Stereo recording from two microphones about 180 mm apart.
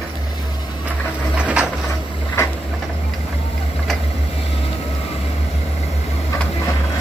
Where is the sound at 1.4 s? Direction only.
5° right (ahead or behind).